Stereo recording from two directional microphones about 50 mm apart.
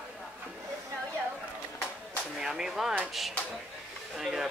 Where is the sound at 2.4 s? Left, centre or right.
Centre.